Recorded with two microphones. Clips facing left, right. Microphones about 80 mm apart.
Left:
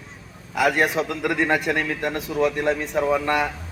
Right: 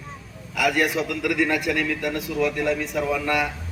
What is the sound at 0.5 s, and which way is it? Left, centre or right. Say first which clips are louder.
A man's voice: left 2 dB; left.